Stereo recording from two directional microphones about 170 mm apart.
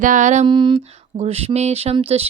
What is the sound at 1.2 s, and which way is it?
Speech, 35° right (ahead or behind).